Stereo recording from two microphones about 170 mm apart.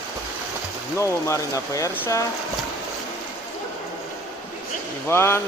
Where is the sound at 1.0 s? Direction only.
20° left (ahead or behind).